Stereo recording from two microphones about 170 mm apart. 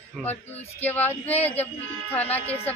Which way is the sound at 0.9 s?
40° left (ahead or behind).